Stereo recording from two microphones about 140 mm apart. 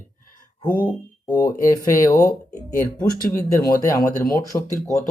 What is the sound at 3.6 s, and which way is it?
Speech, 20° left (ahead or behind).